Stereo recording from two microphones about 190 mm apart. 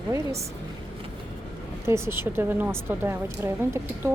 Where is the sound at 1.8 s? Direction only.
15° right (ahead or behind).